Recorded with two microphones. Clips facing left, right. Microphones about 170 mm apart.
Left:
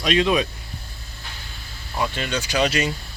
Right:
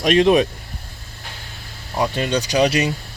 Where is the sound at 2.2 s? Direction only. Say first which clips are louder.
Right 5 dB; 35° right (ahead or behind).